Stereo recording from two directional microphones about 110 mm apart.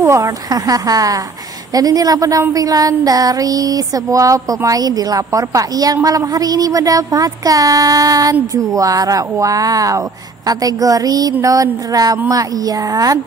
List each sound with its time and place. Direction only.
0.0 s speech: 30° right (ahead or behind)